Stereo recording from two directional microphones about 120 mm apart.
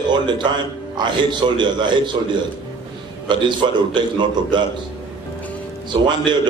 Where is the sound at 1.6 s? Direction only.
40° right (ahead or behind).